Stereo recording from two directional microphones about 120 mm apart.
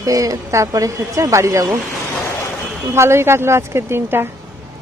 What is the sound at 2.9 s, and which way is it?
Speech, 20° right (ahead or behind).